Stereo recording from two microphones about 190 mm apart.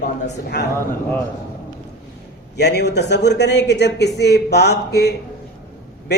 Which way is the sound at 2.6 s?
60° left (ahead or behind).